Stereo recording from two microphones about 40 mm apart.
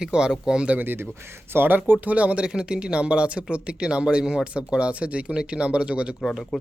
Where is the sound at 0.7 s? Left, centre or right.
Right.